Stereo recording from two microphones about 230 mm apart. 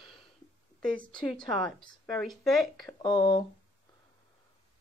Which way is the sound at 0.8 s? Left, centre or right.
Centre.